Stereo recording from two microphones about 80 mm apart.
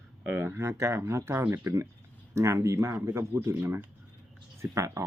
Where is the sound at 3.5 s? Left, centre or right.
Right.